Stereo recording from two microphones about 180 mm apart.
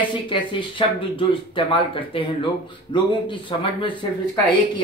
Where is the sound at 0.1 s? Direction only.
30° left (ahead or behind).